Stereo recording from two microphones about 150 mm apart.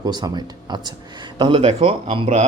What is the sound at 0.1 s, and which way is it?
Speech, 30° right (ahead or behind).